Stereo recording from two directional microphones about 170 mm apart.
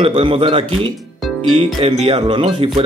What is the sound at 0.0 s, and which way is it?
Speech, 35° right (ahead or behind).